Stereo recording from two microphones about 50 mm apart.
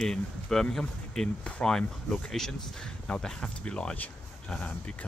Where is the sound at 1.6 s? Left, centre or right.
Centre.